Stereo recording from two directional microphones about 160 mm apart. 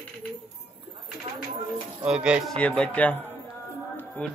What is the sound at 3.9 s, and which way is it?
Music, 5° left (ahead or behind).